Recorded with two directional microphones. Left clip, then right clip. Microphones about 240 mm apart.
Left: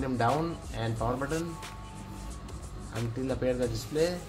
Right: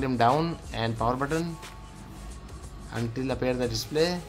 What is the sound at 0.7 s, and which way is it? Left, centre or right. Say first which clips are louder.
Speech: right 5 dB; right.